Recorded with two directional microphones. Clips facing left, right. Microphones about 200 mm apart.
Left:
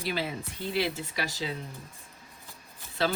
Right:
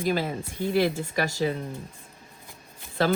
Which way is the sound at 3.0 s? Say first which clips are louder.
Right 5 dB; 50° right (ahead or behind).